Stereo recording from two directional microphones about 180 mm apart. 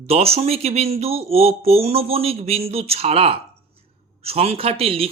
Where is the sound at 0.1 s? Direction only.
35° right (ahead or behind).